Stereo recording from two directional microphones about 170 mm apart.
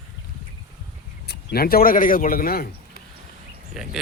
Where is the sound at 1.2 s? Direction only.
65° left (ahead or behind).